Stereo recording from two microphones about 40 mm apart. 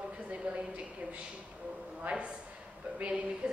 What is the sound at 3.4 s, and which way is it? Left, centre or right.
Speech, right.